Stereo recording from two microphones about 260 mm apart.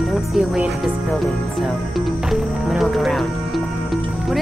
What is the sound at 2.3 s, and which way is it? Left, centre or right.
Music, centre.